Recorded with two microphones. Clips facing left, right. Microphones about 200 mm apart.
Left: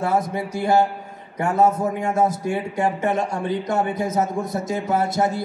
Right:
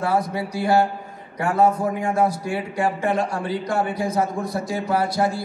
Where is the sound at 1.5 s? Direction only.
25° left (ahead or behind).